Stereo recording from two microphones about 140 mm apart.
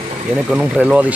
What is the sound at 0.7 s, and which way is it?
Speech, 10° right (ahead or behind).